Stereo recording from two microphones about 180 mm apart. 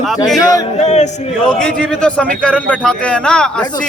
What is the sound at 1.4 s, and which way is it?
Speech, 5° left (ahead or behind).